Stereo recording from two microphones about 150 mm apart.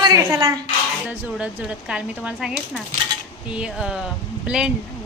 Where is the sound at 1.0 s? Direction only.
10° right (ahead or behind).